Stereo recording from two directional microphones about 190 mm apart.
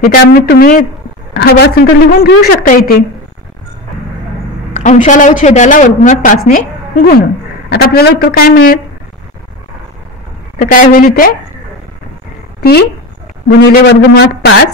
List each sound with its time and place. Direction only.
0.0 s a man's voice: 50° left (ahead or behind)
4.7 s a woman's voice: 40° left (ahead or behind)
10.6 s a man's voice: 45° left (ahead or behind)
13.5 s a woman's voice: 60° left (ahead or behind)